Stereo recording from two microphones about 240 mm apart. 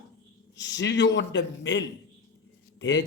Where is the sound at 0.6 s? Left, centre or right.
Left.